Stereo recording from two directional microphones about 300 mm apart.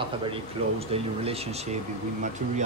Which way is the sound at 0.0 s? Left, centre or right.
Centre.